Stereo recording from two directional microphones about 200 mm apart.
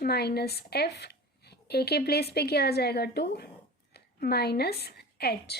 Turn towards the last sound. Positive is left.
turn(degrees=55)  # may be behind; listen again after turning